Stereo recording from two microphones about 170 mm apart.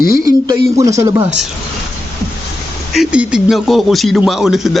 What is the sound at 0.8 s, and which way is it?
Speech, 20° right (ahead or behind).